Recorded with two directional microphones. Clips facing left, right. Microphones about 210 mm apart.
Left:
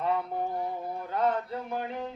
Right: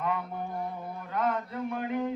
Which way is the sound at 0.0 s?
30° left (ahead or behind).